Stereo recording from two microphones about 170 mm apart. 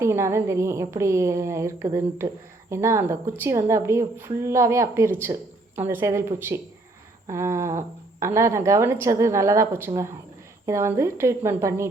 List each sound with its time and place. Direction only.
0.0 s a woman's voice: 15° right (ahead or behind)
5.2 s a sound: 15° right (ahead or behind)
5.9 s a woman's voice: 15° right (ahead or behind)